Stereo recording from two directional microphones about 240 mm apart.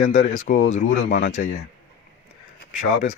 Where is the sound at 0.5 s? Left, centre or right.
Left.